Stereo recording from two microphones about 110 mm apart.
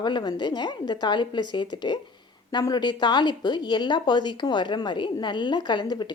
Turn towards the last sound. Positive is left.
turn(degrees=40)  # may be behind; listen again after turning